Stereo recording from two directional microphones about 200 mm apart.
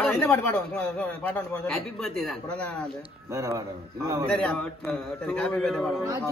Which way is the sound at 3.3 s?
15° right (ahead or behind).